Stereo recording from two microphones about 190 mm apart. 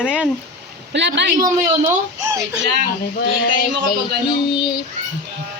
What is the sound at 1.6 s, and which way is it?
Speech, 15° right (ahead or behind).